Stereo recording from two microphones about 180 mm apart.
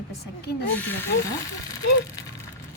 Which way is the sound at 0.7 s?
10° left (ahead or behind).